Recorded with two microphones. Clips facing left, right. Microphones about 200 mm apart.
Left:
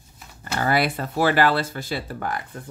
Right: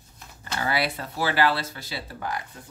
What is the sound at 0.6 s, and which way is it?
Speech, 50° left (ahead or behind).